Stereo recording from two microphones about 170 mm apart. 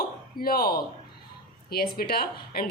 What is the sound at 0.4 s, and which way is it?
Speech, 60° left (ahead or behind).